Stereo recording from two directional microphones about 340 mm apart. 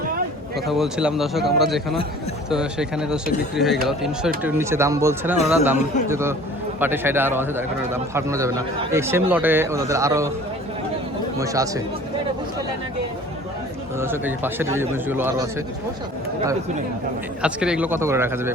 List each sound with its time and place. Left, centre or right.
0.7 s speech: centre
11.3 s speech: centre
14.0 s speech: centre
17.4 s speech: centre